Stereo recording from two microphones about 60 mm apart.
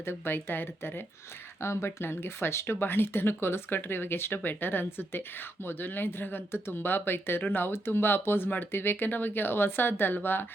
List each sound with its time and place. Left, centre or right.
0.0 s speech: left